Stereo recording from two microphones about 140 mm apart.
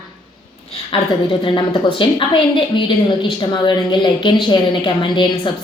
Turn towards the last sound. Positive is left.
turn(degrees=35)  # may be behind; listen again after turning